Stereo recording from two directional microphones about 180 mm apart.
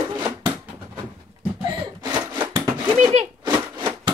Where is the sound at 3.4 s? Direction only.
25° right (ahead or behind).